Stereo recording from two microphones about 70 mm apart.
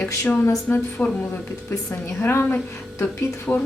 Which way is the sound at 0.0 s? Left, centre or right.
Centre.